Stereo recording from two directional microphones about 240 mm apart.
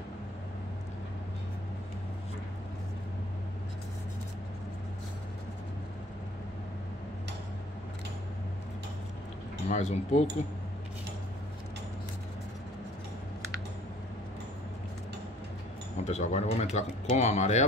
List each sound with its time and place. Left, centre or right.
9.7 s speech: left
16.0 s speech: left